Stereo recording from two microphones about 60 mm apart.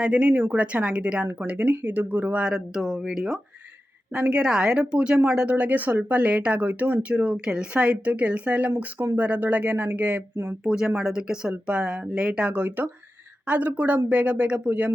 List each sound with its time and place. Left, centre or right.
0.0 s a woman's voice: right